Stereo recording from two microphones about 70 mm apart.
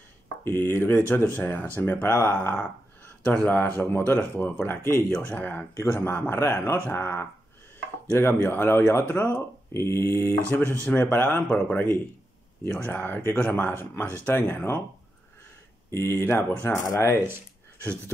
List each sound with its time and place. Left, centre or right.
0.5 s speech: left
4.8 s speech: left
5.3 s speech: left
9.0 s speech: left
9.8 s speech: left
10.5 s speech: left
15.9 s speech: left
16.6 s speech: left